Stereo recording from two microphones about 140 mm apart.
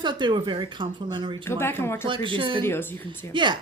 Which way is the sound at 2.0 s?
35° right (ahead or behind).